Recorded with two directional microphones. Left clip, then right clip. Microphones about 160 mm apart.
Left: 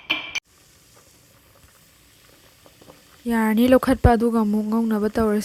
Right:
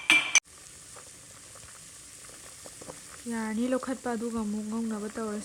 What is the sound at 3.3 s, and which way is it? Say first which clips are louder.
Speech: left 14 dB; 60° left (ahead or behind).